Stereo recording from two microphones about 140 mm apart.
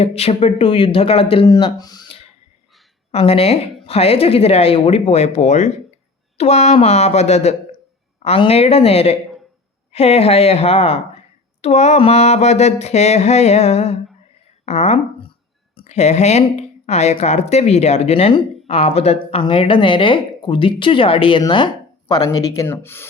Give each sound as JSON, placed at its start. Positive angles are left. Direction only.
{"t": 0.0, "sound": "speech", "side_deg": 45}
{"t": 1.5, "sound": "speech", "side_deg": 30}